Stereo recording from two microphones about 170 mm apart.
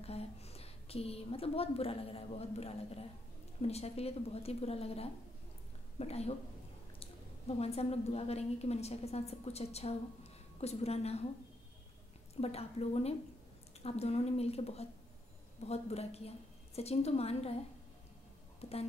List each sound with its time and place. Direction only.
0.0 s a woman's voice: 35° left (ahead or behind)
12.4 s a woman's voice: 35° left (ahead or behind)
18.6 s speech: 35° left (ahead or behind)